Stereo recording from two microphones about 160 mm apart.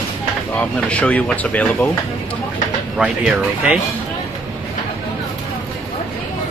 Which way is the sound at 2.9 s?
5° right (ahead or behind).